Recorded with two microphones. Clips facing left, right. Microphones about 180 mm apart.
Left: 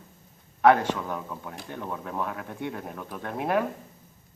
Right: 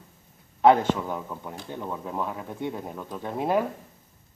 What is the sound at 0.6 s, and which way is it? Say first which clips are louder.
Speech: right 1 dB; 20° right (ahead or behind).